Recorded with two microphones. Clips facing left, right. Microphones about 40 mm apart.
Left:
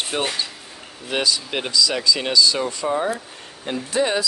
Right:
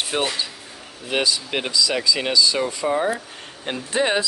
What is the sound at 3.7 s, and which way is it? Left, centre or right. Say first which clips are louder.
Speech: even; right.